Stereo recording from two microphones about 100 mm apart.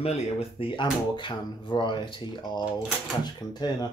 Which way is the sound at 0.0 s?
85° left.